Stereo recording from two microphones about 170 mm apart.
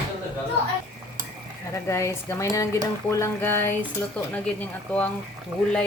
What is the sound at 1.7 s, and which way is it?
A woman's voice, 15° left (ahead or behind).